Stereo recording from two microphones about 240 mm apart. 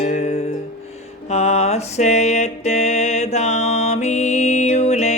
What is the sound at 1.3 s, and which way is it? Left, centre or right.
Mantra, left.